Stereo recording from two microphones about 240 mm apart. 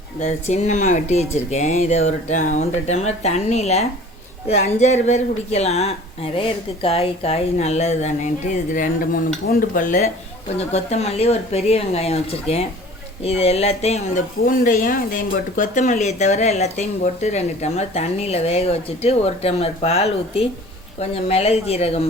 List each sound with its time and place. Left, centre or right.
0.2 s speech: left
9.5 s dishes: left
10.6 s speech: left